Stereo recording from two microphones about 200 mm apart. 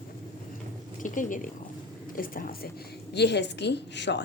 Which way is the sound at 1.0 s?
40° left (ahead or behind).